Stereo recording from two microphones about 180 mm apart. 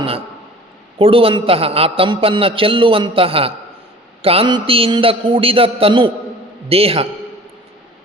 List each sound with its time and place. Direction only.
0.9 s a man's voice: 30° right (ahead or behind)